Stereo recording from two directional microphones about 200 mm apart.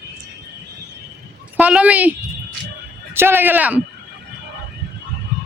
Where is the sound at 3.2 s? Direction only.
10° right (ahead or behind).